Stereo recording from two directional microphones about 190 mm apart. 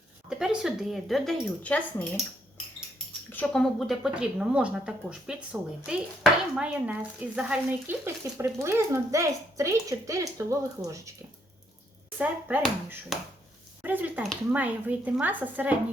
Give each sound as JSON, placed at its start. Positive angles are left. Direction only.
{"t": 0.3, "sound": "speech", "side_deg": -5}
{"t": 3.3, "sound": "speech", "side_deg": 5}
{"t": 12.1, "sound": "speech", "side_deg": -10}